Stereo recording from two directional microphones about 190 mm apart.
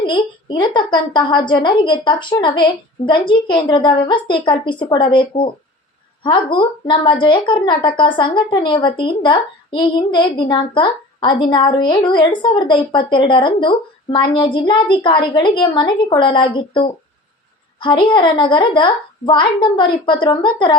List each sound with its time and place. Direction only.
0.0 s a woman's voice: 25° left (ahead or behind)